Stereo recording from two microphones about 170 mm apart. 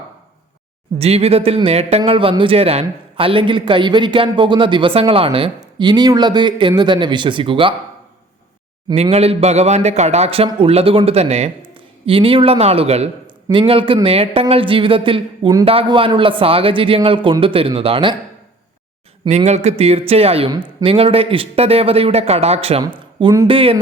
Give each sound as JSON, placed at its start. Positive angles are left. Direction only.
{"t": 0.9, "sound": "a man's voice", "side_deg": -35}
{"t": 9.0, "sound": "a man's voice", "side_deg": -35}
{"t": 19.3, "sound": "a man's voice", "side_deg": -40}